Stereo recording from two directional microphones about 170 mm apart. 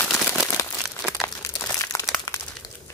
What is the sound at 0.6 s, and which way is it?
Crumpling, 20° left (ahead or behind).